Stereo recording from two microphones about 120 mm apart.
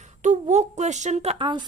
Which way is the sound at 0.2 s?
80° right.